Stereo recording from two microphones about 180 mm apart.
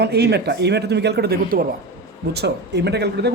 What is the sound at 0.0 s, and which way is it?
A man's voice, 65° right (ahead or behind).